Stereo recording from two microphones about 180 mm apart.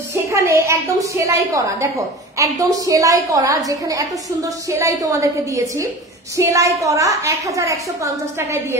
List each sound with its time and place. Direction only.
0.1 s a woman's voice: 15° right (ahead or behind)